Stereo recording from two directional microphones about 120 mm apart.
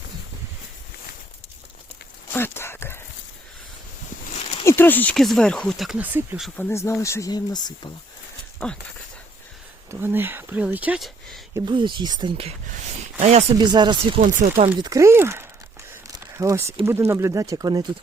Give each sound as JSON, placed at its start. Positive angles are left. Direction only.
{"t": 2.3, "sound": "a sound", "side_deg": 20}
{"t": 4.6, "sound": "a sound", "side_deg": 15}
{"t": 5.1, "sound": "speech", "side_deg": 0}
{"t": 6.0, "sound": "speech", "side_deg": -15}
{"t": 6.6, "sound": "speech", "side_deg": 20}
{"t": 8.5, "sound": "speech", "side_deg": 5}
{"t": 9.9, "sound": "speech", "side_deg": -15}
{"t": 11.5, "sound": "speech", "side_deg": -40}
{"t": 13.1, "sound": "speech", "side_deg": -65}
{"t": 13.6, "sound": "speech", "side_deg": -35}
{"t": 14.2, "sound": "speech", "side_deg": -85}
{"t": 14.8, "sound": "speech", "side_deg": -30}